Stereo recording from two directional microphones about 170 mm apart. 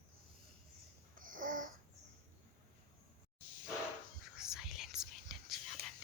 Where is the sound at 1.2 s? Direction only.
50° right (ahead or behind).